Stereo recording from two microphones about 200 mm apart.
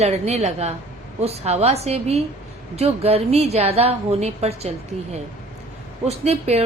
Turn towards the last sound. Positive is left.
turn(degrees=-30)  # may be behind; listen again after turning